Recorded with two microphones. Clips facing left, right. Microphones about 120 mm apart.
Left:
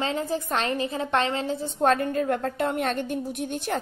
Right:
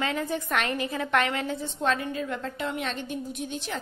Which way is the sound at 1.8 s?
50° left (ahead or behind).